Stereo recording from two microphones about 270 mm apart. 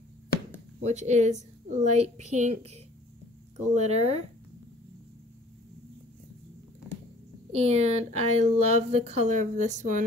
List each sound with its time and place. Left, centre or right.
0.8 s speech: right
7.5 s speech: right